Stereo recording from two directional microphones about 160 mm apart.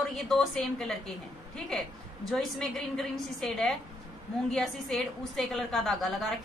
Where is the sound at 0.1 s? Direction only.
Centre (ahead or behind).